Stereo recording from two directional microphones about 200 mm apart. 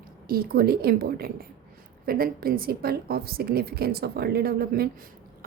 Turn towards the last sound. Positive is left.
turn(degrees=-50)  # may be behind; listen again after turning